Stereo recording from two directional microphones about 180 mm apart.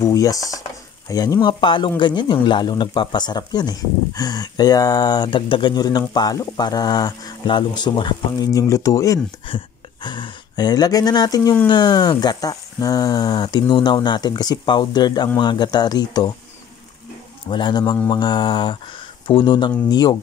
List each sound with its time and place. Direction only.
0.0 s speech: 20° left (ahead or behind)
17.5 s speech: 25° left (ahead or behind)